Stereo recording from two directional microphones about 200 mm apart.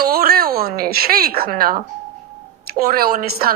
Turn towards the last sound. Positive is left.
turn(degrees=-50)  # may be behind; listen again after turning